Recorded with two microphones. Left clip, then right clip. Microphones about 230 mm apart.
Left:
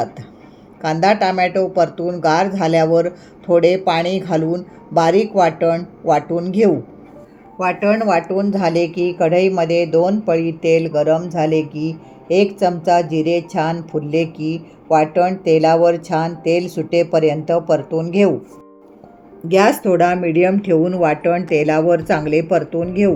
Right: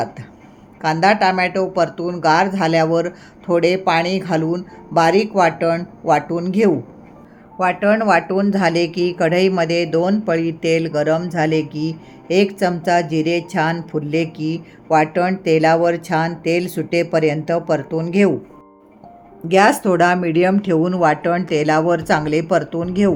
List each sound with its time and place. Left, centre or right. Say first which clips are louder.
0.8 s a woman's voice: even; centre
19.5 s speech: even; centre